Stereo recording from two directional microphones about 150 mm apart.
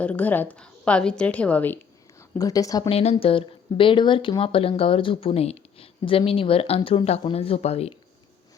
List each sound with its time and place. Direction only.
0.0 s a woman's voice: 10° left (ahead or behind)
2.4 s a woman's voice: 25° left (ahead or behind)
2.9 s speech: 40° left (ahead or behind)